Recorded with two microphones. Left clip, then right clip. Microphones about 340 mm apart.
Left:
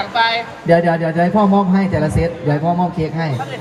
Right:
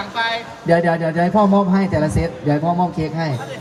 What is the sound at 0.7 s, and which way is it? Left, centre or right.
Speech, centre.